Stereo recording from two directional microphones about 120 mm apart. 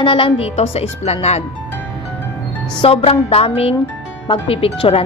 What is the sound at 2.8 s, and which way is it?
Speech, 55° left (ahead or behind).